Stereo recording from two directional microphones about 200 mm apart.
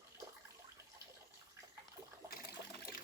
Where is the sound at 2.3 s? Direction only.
50° left (ahead or behind).